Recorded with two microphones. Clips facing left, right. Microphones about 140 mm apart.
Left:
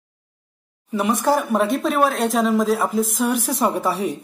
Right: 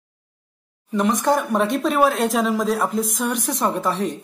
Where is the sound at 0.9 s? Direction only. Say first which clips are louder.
Even; 5° left (ahead or behind).